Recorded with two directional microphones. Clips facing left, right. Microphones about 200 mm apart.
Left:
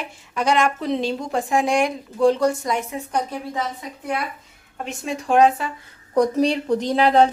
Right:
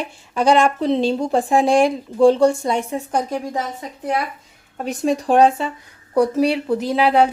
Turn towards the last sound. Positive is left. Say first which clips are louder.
# even
turn(degrees=-10)  # may be behind; listen again after turning